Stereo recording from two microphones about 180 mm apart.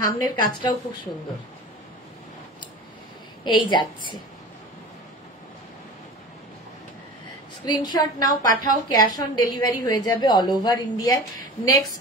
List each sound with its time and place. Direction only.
0.0 s a woman's voice: 25° left (ahead or behind)
3.4 s a woman's voice: 25° left (ahead or behind)
7.6 s a woman's voice: 25° left (ahead or behind)